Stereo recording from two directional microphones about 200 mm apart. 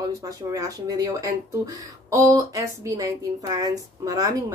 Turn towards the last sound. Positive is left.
turn(degrees=-20)  # may be behind; listen again after turning